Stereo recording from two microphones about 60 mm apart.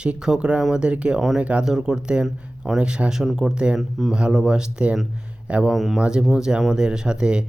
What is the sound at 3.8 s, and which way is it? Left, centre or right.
Speech, centre.